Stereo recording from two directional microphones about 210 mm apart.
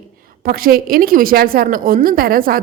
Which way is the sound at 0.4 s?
45° right (ahead or behind).